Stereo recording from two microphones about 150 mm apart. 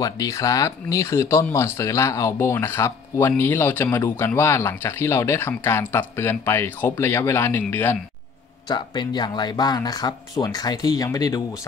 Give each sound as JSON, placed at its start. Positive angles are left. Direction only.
{"t": 0.0, "sound": "speech", "side_deg": 25}
{"t": 8.6, "sound": "speech", "side_deg": 30}